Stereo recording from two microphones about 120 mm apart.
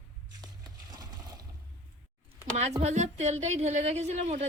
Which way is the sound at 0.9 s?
30° right (ahead or behind).